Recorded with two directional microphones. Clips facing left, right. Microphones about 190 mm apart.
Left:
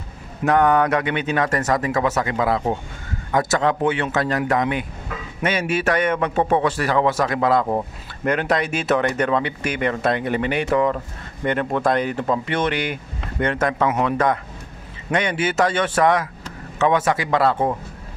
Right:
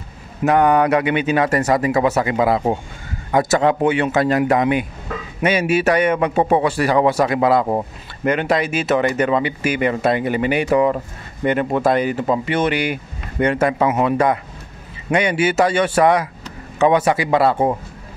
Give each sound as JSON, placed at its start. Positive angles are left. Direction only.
{"t": 0.4, "sound": "speech", "side_deg": -10}